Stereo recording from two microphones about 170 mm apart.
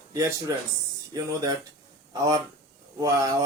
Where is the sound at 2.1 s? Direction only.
25° right (ahead or behind).